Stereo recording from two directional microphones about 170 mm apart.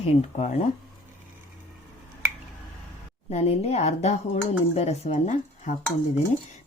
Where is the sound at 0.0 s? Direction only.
40° left (ahead or behind).